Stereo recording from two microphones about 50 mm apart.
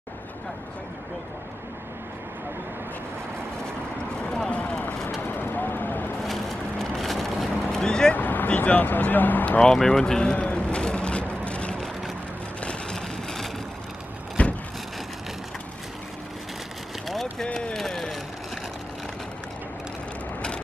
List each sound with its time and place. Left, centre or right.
3.6 s vehicle: centre
4.5 s a sound: left
5.2 s vehicle: left
6.2 s vehicle: centre
7.7 s vehicle: centre
8.1 s speech: left
9.6 s speech: centre
10.3 s vehicle: left
12.9 s vehicle: centre
14.4 s vehicle: left
17.1 s a sound: centre